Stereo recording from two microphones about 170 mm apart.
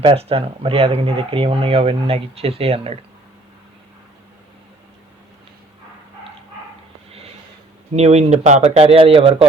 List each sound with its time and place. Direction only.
0.0 s speech: 35° right (ahead or behind)
7.9 s speech: 40° right (ahead or behind)